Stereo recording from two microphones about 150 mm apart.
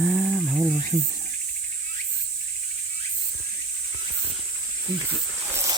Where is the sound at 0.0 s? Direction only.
Centre (ahead or behind).